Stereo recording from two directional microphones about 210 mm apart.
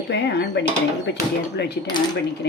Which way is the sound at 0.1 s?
55° left (ahead or behind).